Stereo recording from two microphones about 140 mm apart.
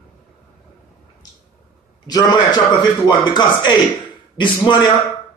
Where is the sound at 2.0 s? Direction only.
30° left (ahead or behind).